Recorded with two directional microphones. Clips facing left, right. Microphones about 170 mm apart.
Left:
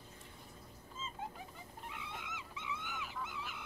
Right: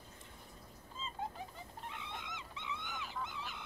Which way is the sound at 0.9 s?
35° right (ahead or behind).